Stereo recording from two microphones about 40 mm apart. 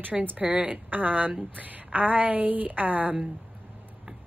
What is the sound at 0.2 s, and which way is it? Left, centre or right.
Speech, right.